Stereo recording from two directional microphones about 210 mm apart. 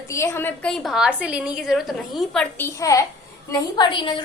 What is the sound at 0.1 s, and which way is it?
A woman's voice, 15° left (ahead or behind).